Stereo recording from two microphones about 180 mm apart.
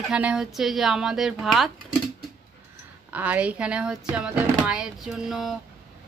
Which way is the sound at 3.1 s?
10° right (ahead or behind).